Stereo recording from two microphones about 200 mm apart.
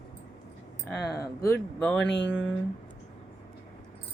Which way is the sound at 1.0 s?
15° left (ahead or behind).